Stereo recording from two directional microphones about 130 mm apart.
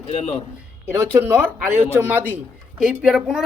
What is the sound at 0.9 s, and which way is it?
Speech, 15° right (ahead or behind).